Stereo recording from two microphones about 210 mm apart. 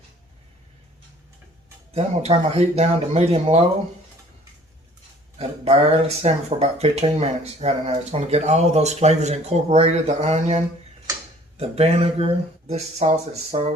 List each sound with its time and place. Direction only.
1.9 s speech: 30° right (ahead or behind)
5.4 s speech: 30° right (ahead or behind)